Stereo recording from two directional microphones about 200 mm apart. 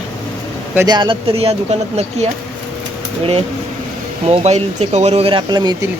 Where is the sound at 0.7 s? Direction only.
20° right (ahead or behind).